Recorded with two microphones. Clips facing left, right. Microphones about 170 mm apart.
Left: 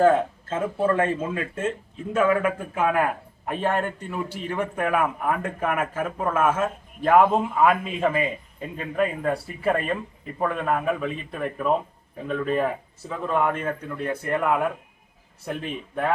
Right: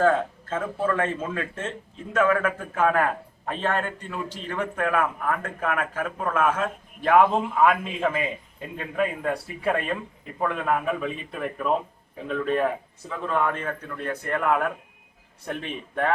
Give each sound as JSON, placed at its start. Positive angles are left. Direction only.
{"t": 0.0, "sound": "a man's voice", "side_deg": 20}